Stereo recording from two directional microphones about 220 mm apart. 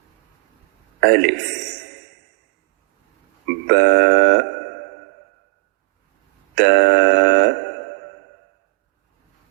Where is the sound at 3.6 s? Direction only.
50° right (ahead or behind).